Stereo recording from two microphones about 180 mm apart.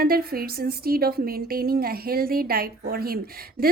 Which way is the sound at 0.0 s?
55° right (ahead or behind).